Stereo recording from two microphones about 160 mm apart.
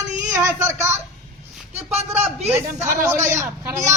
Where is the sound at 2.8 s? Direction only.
15° right (ahead or behind).